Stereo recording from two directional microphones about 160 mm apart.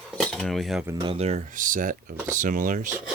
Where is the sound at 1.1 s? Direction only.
40° right (ahead or behind).